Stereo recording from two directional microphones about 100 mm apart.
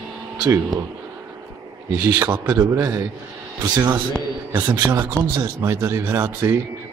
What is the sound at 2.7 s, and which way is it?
A man's voice, 35° right (ahead or behind).